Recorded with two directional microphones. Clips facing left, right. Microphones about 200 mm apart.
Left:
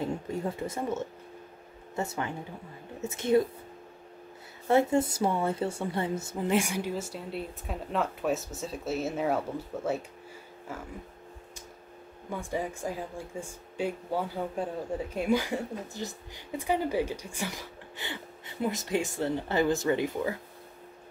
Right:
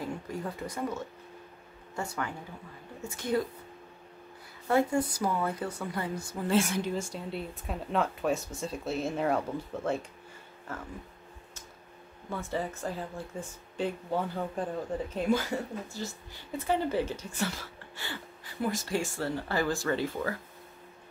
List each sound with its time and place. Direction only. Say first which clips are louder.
0.0 s speech: left 4 dB; 25° left (ahead or behind)
4.6 s speech: left 3 dB; 25° left (ahead or behind); by 10.0 s 5° left (ahead or behind)
12.3 s speech: left 1 dB; 15° left (ahead or behind)